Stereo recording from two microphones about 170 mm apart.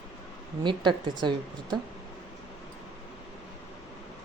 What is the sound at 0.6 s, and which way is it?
A woman's voice, 25° right (ahead or behind).